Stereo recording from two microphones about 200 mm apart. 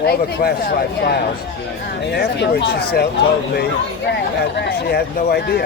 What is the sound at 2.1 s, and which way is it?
Speech, 55° left (ahead or behind).